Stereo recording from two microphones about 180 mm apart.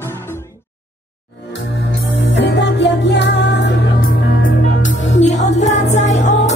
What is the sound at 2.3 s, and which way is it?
Music, 80° left.